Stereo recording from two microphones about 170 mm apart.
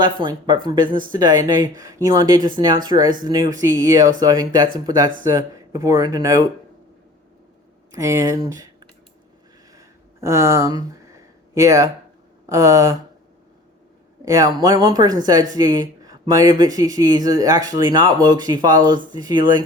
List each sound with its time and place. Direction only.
0.0 s speech: 25° right (ahead or behind)
7.9 s speech: 20° right (ahead or behind)
9.7 s a sound: 15° right (ahead or behind)
11.5 s speech: 15° right (ahead or behind)
14.2 s speech: 20° right (ahead or behind)